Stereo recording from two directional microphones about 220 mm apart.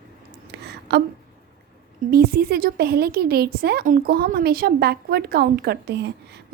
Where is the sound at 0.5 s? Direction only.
50° right (ahead or behind).